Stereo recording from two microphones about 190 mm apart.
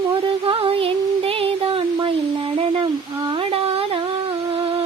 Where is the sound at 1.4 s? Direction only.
30° right (ahead or behind).